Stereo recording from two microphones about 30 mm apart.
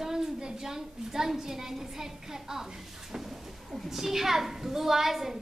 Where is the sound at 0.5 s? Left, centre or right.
Centre.